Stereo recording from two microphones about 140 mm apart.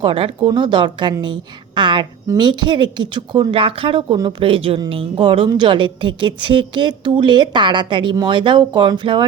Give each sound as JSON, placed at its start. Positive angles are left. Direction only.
{"t": 0.0, "sound": "speech", "side_deg": -40}